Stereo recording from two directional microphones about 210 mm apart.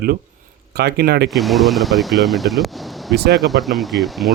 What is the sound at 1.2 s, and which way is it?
Speech, centre (ahead or behind).